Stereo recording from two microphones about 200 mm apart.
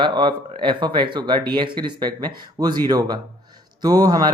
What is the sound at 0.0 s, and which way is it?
Speech, 25° right (ahead or behind).